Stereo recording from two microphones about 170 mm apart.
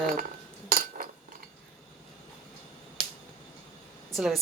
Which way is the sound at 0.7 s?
60° right (ahead or behind).